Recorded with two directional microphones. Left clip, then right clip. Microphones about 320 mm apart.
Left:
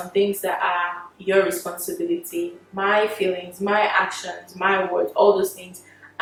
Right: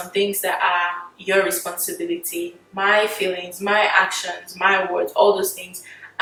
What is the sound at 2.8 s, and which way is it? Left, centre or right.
Speech, centre.